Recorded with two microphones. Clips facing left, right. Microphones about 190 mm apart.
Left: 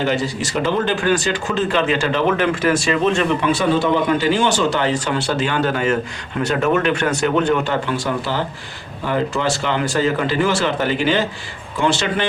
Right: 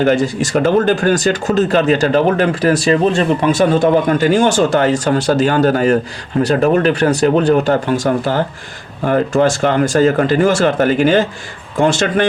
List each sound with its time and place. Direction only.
0.0 s speech: 50° right (ahead or behind)